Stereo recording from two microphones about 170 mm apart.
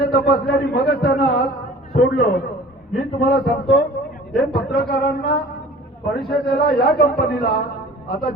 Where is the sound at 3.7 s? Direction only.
85° left.